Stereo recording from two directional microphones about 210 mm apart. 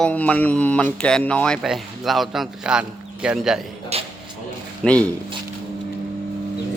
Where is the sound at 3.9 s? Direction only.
30° right (ahead or behind).